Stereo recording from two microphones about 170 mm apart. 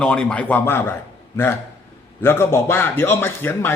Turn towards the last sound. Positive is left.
turn(degrees=15)  # may be behind; listen again after turning